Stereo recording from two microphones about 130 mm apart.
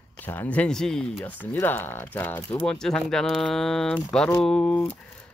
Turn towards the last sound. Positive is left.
turn(degrees=10)  # may be behind; listen again after turning